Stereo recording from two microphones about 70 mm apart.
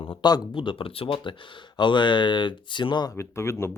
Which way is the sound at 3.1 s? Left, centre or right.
Left.